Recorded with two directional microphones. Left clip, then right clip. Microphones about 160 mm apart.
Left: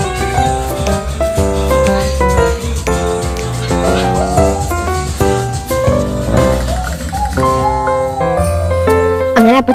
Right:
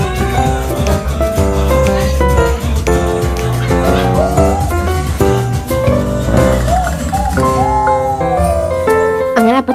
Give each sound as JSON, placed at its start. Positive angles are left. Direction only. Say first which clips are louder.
{"t": 1.5, "sound": "music", "louder": "left 2 dB", "side_deg": 0}
{"t": 6.3, "sound": "music", "louder": "right 2 dB", "side_deg": 0}
{"t": 9.3, "sound": "music", "louder": "left 2 dB", "side_deg": 45}